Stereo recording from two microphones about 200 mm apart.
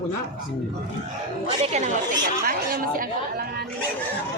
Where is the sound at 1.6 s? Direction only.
35° right (ahead or behind).